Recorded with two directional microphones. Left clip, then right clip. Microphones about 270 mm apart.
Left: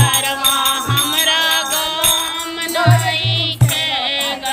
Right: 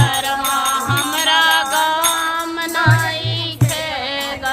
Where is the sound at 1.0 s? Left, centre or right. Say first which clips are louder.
Right 1 dB; centre.